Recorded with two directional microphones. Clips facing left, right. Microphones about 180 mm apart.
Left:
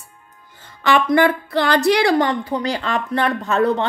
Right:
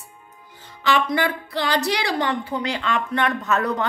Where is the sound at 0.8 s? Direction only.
50° left (ahead or behind); by 3.9 s 30° left (ahead or behind).